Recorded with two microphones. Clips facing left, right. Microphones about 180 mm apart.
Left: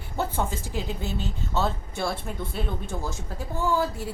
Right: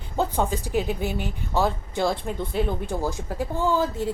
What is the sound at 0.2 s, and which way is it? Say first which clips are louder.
Speech: right 4 dB; 15° right (ahead or behind).